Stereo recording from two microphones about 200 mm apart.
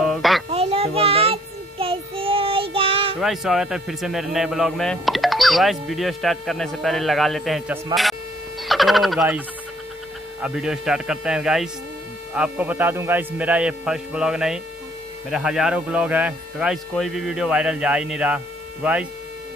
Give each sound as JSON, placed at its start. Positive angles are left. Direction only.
{"t": 0.0, "sound": "a sound", "side_deg": 0}
{"t": 0.5, "sound": "child singing", "side_deg": -30}
{"t": 3.2, "sound": "a man's voice", "side_deg": 0}
{"t": 10.4, "sound": "a man's voice", "side_deg": -5}